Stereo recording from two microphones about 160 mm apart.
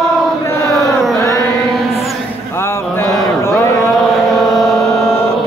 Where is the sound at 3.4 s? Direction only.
20° left (ahead or behind).